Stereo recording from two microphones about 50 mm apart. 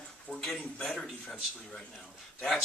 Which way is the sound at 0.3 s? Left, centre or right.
Centre.